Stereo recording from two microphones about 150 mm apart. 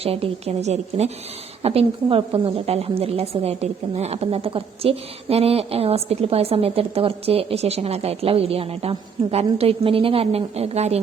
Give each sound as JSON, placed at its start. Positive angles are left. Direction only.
{"t": 0.0, "sound": "a woman's voice", "side_deg": -40}